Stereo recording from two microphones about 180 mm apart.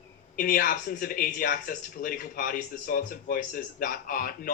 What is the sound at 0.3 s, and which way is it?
Speech, 50° left (ahead or behind).